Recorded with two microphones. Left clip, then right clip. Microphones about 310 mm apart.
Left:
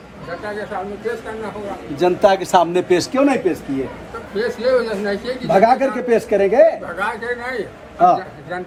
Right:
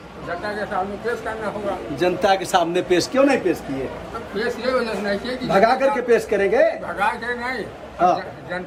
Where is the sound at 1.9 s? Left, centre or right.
Centre.